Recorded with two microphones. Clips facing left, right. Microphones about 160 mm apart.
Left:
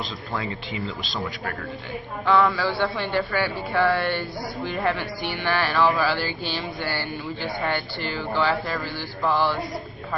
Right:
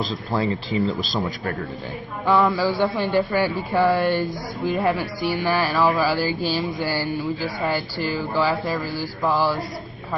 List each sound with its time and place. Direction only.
0.0 s speech: 35° right (ahead or behind)
2.2 s a woman's voice: 15° right (ahead or behind)
8.1 s a woman's voice: 5° right (ahead or behind)